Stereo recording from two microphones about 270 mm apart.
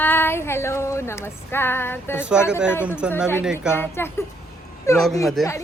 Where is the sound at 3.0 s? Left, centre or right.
Centre.